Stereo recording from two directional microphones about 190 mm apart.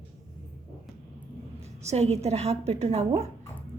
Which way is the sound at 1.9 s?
35° right (ahead or behind).